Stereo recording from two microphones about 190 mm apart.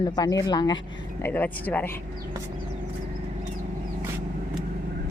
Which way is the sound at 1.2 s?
10° left (ahead or behind).